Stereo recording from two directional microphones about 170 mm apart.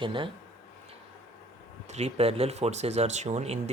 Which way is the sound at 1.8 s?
40° right (ahead or behind).